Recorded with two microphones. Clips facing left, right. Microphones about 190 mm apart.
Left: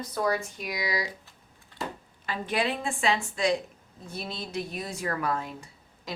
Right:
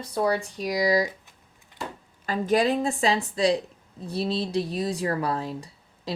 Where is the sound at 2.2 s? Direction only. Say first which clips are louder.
Right 7 dB; 40° right (ahead or behind).